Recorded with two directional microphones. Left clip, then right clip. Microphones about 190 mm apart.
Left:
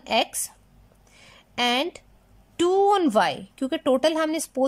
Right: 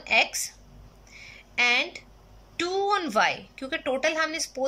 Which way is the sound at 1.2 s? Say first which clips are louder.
Right 1 dB; 30° left (ahead or behind).